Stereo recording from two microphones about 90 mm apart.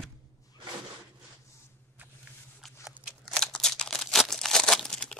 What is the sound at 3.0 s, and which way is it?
Crumpling, centre (ahead or behind).